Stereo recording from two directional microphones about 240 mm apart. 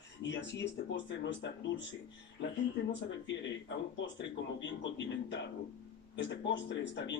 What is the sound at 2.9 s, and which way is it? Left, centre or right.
Speech, left.